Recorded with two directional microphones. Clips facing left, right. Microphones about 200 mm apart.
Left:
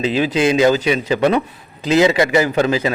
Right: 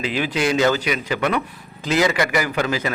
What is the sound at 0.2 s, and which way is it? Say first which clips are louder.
A man's voice: left 4 dB; 25° left (ahead or behind).